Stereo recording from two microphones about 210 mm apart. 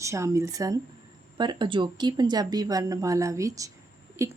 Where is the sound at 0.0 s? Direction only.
15° right (ahead or behind).